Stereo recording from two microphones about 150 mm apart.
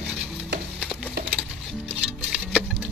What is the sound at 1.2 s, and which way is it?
Music, 90° right.